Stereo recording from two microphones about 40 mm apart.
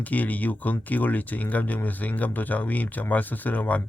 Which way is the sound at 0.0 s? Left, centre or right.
Left.